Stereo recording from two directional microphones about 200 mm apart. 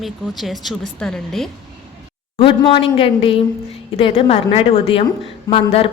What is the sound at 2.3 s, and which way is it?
A woman's voice, 25° left (ahead or behind).